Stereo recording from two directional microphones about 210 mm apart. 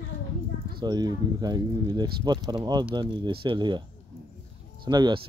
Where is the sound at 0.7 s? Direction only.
20° right (ahead or behind).